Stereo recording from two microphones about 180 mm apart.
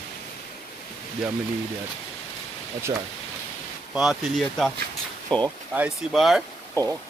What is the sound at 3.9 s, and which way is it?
Speech, 5° right (ahead or behind).